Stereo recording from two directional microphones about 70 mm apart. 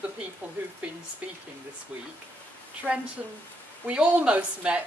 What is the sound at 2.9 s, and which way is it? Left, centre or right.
A woman's voice, right.